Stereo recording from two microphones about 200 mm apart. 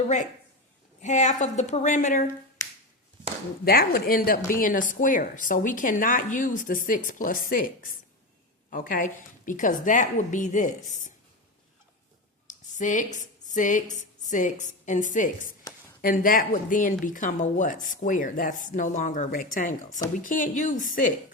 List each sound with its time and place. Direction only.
1.0 s speech: 35° left (ahead or behind)
2.6 s finger snapping: 15° left (ahead or behind)
3.6 s a woman's voice: 50° left (ahead or behind)
12.5 s a woman's voice: 40° left (ahead or behind)